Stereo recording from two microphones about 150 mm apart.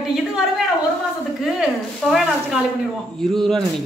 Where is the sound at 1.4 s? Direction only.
Centre (ahead or behind).